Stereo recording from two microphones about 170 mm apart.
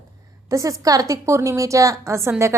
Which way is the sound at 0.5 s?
20° right (ahead or behind).